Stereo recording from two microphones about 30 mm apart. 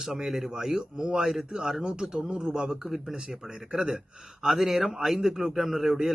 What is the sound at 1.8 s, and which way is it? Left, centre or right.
Speech, right.